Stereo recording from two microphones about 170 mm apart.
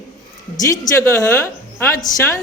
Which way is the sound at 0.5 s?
15° left (ahead or behind).